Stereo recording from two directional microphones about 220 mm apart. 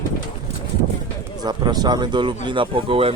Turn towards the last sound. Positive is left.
turn(degrees=-25)  # may be behind; listen again after turning